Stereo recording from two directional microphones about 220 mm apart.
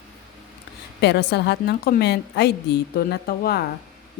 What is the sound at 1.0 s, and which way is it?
Speech, 50° left (ahead or behind).